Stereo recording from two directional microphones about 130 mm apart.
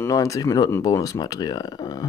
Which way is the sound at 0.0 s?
25° left (ahead or behind).